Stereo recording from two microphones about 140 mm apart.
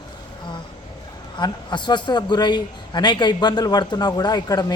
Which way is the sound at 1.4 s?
30° left (ahead or behind).